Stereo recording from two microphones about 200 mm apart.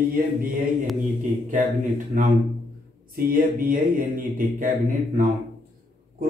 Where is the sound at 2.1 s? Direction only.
40° right (ahead or behind).